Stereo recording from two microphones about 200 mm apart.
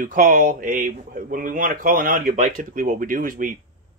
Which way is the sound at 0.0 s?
40° right (ahead or behind).